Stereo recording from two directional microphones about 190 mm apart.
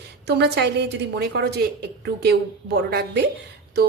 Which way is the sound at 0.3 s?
60° right (ahead or behind).